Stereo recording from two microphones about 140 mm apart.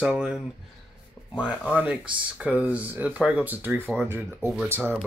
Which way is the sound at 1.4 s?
10° right (ahead or behind).